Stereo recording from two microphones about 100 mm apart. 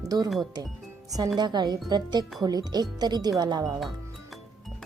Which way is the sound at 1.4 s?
45° right (ahead or behind).